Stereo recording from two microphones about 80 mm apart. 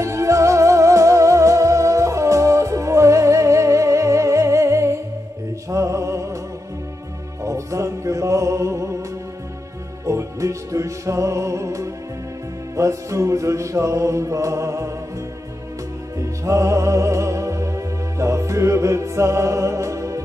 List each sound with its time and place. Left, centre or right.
0.0 s music: right
7.4 s music: right
10.0 s music: right
16.2 s music: right